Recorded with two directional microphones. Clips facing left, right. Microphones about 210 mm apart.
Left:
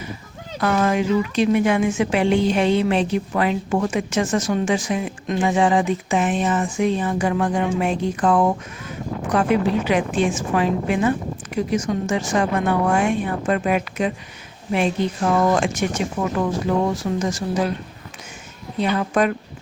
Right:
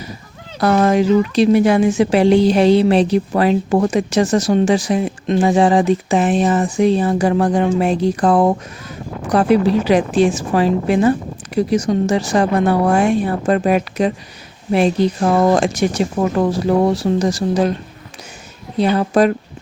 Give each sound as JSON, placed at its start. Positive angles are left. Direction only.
{"t": 0.6, "sound": "speech", "side_deg": -35}
{"t": 18.8, "sound": "speech", "side_deg": -35}